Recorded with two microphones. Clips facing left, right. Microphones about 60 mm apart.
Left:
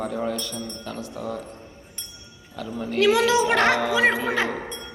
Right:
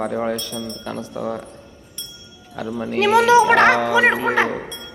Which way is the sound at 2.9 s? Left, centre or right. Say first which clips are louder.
Right 5 dB; right.